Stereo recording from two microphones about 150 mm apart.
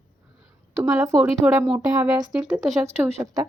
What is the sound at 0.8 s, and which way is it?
A woman's voice, 20° right (ahead or behind).